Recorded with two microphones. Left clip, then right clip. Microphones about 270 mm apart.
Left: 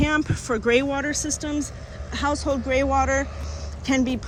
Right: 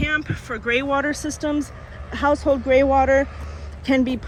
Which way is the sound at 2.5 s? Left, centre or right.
Right.